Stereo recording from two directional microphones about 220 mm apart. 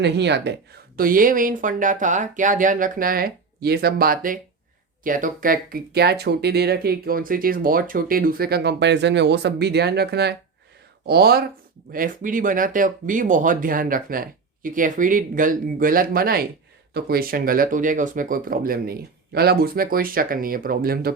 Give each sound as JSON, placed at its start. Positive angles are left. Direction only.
{"t": 0.0, "sound": "speech", "side_deg": -50}